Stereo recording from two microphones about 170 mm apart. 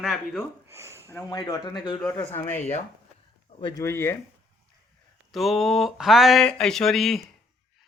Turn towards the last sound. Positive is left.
turn(degrees=0)  # may be behind; listen again after turning